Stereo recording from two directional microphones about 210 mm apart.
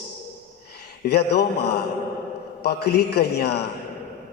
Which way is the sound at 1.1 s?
50° left (ahead or behind).